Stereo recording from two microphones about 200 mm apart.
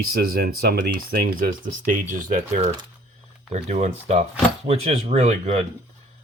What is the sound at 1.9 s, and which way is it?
Speech, 40° right (ahead or behind).